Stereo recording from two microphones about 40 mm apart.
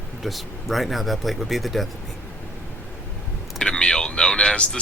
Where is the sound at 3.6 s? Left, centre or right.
Left.